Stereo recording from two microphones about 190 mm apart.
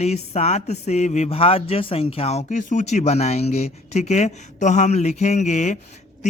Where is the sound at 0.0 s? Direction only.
35° left (ahead or behind).